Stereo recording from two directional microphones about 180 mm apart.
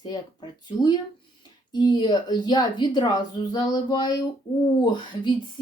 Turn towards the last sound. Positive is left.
turn(degrees=25)  # may be behind; listen again after turning